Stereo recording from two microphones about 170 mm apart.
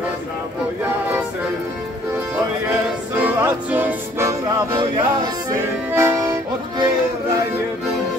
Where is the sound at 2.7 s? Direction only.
10° right (ahead or behind).